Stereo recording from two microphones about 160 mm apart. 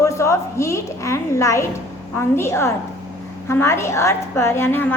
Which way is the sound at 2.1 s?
15° left (ahead or behind).